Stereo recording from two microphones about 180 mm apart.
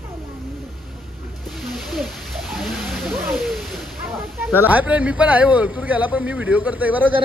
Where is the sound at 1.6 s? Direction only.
Centre (ahead or behind).